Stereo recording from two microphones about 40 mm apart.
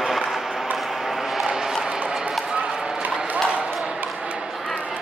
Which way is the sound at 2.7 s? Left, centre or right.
Centre.